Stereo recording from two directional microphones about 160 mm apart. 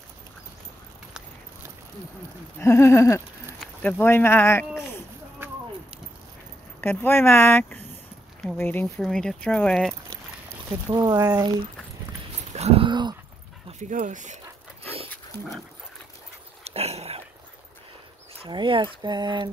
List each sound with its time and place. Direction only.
2.6 s speech: 15° left (ahead or behind)
6.8 s speech: 15° left (ahead or behind)
10.9 s speech: 25° right (ahead or behind)
12.5 s dog: 40° right (ahead or behind)
13.7 s dog: 50° right (ahead or behind)
16.6 s dog: 40° right (ahead or behind)
18.4 s speech: 30° right (ahead or behind)